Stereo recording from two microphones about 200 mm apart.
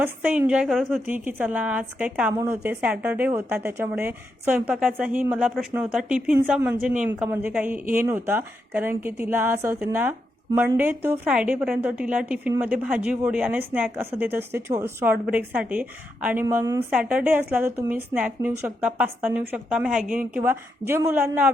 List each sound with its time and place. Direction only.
0.0 s a woman's voice: 10° right (ahead or behind)